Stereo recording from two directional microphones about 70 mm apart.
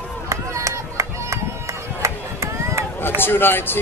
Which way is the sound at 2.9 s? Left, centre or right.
Left.